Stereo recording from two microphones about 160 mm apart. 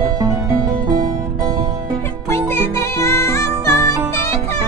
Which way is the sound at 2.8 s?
15° left (ahead or behind).